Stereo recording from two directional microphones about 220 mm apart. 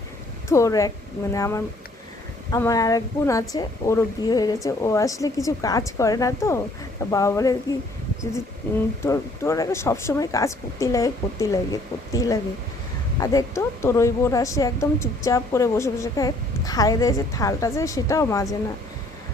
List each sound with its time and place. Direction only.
0.4 s a woman's voice: 15° left (ahead or behind)
9.0 s a woman's voice: 15° left (ahead or behind)